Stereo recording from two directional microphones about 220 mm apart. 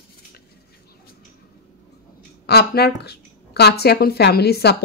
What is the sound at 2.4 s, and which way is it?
A woman's voice, 45° left (ahead or behind).